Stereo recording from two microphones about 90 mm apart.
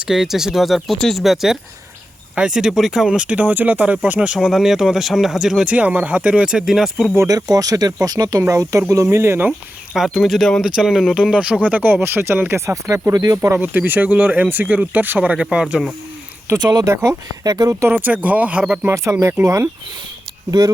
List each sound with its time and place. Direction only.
0.1 s speech: 5° right (ahead or behind)
4.4 s speech: centre (ahead or behind)
7.3 s speech: 45° right (ahead or behind)
8.4 s speech: 35° right (ahead or behind)
9.5 s speech: 5° right (ahead or behind); by 13.5 s 45° right (ahead or behind)
13.5 s speech: 20° right (ahead or behind)
16.6 s speech: 40° right (ahead or behind)
16.9 s speech: 30° right (ahead or behind)
17.4 s speech: 45° right (ahead or behind)
17.8 s speech: 15° right (ahead or behind)
19.2 s speech: 30° right (ahead or behind)